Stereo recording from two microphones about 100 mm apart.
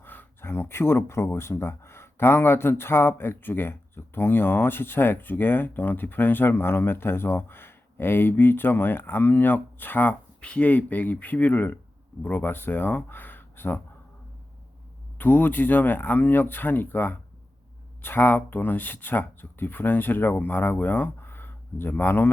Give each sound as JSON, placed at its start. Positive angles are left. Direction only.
{"t": 0.0, "sound": "speech", "side_deg": 20}
{"t": 15.2, "sound": "speech", "side_deg": 20}